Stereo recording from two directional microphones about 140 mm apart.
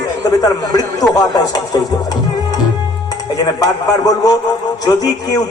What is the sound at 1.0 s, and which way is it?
Speech, 30° left (ahead or behind).